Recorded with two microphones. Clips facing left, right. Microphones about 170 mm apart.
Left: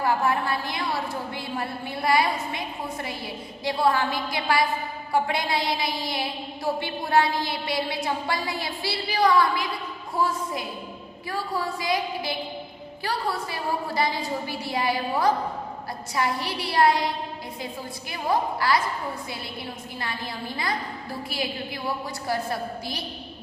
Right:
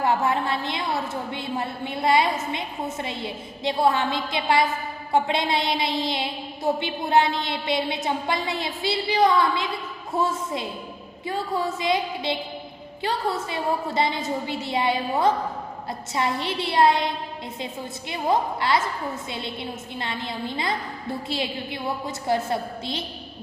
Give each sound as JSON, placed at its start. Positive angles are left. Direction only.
{"t": 0.0, "sound": "a woman's voice", "side_deg": -25}
{"t": 18.1, "sound": "a woman's voice", "side_deg": -25}